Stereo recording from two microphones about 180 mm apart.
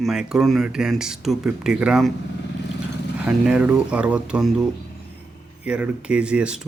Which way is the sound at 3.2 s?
5° right (ahead or behind).